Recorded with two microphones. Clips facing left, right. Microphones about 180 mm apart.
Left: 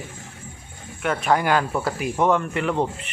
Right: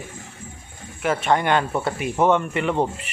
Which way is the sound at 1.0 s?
Centre (ahead or behind).